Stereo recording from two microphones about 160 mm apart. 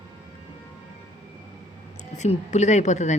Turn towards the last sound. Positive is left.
turn(degrees=50)  # may be behind; listen again after turning